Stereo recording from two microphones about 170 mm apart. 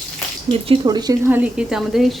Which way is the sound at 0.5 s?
35° right (ahead or behind).